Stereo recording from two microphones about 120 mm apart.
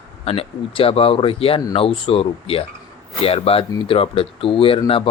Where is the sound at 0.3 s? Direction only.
55° left (ahead or behind).